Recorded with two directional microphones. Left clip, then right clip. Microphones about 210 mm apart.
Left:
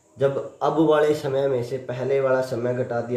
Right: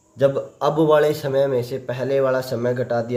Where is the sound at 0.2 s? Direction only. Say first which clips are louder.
Right 3 dB; 40° right (ahead or behind).